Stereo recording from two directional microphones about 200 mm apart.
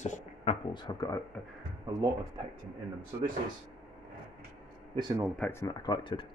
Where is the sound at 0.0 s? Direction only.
35° left (ahead or behind).